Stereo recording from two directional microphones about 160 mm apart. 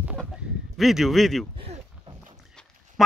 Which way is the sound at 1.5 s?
35° right (ahead or behind).